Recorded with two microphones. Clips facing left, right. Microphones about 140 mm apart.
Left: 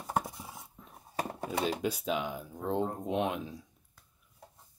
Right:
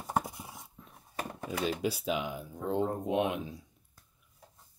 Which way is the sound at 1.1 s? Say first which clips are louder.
Left 3 dB; 40° left (ahead or behind).